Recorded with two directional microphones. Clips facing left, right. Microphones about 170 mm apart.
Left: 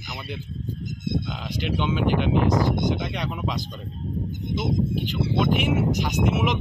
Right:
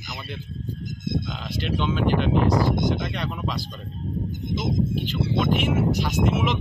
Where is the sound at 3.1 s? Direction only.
15° left (ahead or behind).